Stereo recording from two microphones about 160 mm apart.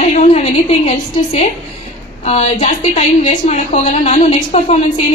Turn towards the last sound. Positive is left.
turn(degrees=45)  # may be behind; listen again after turning